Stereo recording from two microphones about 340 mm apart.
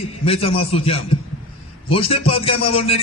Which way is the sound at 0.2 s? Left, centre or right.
Centre.